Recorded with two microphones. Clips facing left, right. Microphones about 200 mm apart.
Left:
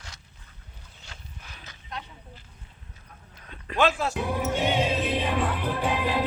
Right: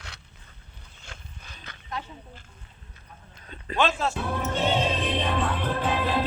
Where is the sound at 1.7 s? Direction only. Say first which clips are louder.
Right 4 dB; 60° right (ahead or behind).